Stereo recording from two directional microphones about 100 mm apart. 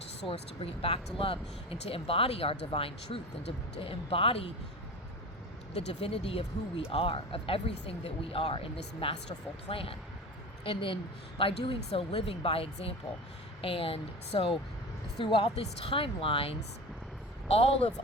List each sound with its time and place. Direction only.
0.3 s a woman's voice: 70° left (ahead or behind)
5.7 s a woman's voice: 80° left
17.5 s speech: 90° left